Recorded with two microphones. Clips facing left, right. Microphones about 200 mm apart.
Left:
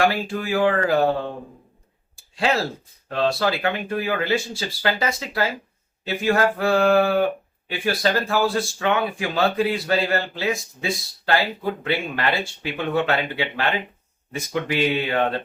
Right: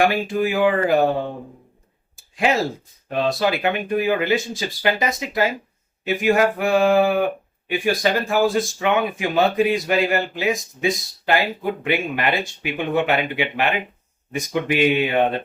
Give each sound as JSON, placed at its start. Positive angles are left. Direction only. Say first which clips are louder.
{"t": 0.0, "sound": "speech", "louder": "right 3 dB", "side_deg": -15}
{"t": 2.1, "sound": "a sound", "louder": "right 2 dB", "side_deg": -15}
{"t": 3.1, "sound": "speech", "louder": "right 1 dB", "side_deg": -15}